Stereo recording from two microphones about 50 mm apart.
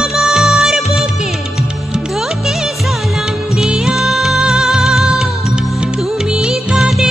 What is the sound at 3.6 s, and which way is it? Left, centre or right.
Music, centre.